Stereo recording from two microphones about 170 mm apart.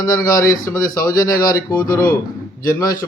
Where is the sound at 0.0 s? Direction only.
20° left (ahead or behind).